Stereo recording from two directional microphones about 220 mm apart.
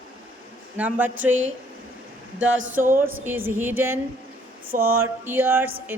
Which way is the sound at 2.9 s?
10° right (ahead or behind).